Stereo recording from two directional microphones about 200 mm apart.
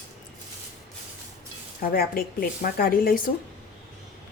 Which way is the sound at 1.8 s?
45° left (ahead or behind).